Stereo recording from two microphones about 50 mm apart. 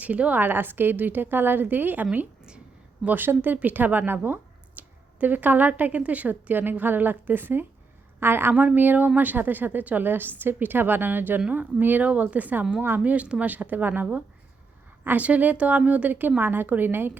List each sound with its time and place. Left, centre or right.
0.0 s a woman's voice: right
0.4 s a woman's voice: right
3.1 s a woman's voice: right
8.5 s a woman's voice: right